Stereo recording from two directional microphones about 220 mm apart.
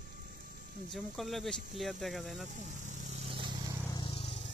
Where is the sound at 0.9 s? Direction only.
Centre (ahead or behind).